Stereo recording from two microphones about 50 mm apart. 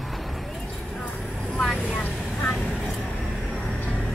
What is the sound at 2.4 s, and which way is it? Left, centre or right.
Vehicle, left.